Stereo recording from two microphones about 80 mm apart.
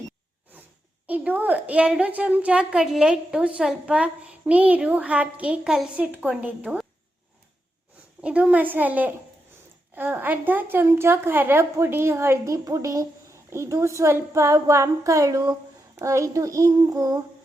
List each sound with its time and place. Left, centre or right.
1.0 s a woman's voice: centre
6.1 s a woman's voice: right
8.2 s a woman's voice: centre; by 17.2 s right